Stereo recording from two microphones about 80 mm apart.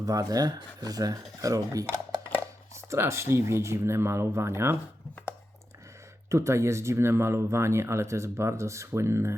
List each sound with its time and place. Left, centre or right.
0.0 s speech: right
6.2 s speech: right